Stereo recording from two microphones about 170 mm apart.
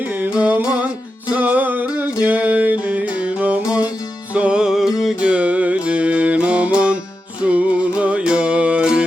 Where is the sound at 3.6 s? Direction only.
20° left (ahead or behind).